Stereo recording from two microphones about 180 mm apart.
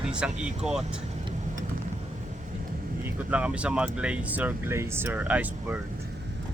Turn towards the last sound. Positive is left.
turn(degrees=-10)  # may be behind; listen again after turning